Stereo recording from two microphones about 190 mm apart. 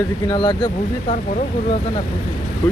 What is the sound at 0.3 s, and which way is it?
Speech, 25° left (ahead or behind).